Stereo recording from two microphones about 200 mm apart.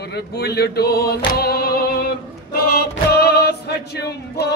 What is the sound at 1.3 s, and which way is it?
Music, 50° left (ahead or behind).